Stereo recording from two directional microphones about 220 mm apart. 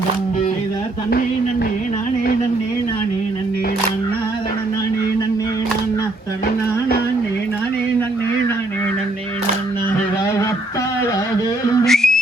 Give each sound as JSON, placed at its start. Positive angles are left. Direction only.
{"t": 11.9, "sound": "whistling", "side_deg": 0}